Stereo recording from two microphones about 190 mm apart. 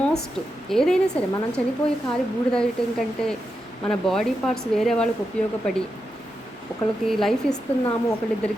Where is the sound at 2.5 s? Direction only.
5° left (ahead or behind).